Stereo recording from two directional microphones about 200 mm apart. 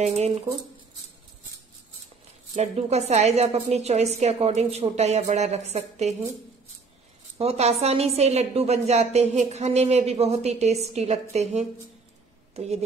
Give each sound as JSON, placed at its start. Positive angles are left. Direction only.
{"t": 2.5, "sound": "a woman's voice", "side_deg": -35}
{"t": 7.3, "sound": "a woman's voice", "side_deg": -30}